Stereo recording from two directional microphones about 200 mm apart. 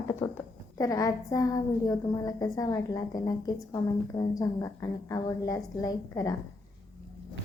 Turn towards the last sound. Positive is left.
turn(degrees=20)  # may be behind; listen again after turning